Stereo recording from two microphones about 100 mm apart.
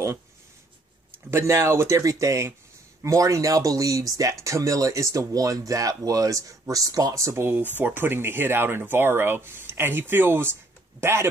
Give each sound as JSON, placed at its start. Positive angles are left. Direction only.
{"t": 1.3, "sound": "speech", "side_deg": -25}